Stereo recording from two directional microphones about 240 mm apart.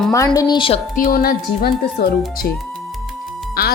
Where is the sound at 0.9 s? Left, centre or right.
Left.